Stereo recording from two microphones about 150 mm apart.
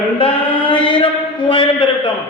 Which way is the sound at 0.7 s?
35° left (ahead or behind).